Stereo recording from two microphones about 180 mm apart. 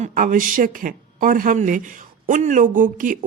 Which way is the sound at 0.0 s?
50° right (ahead or behind).